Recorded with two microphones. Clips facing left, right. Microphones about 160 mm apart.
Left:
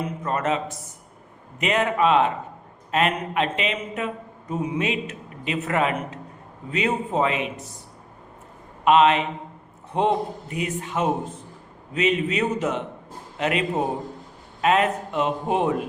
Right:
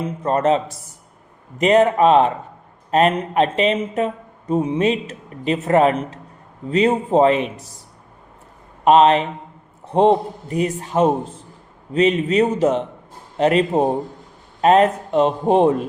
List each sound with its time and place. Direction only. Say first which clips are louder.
0.2 s speech: right 9 dB; 30° right (ahead or behind)
8.8 s speech: right 4 dB; 35° right (ahead or behind)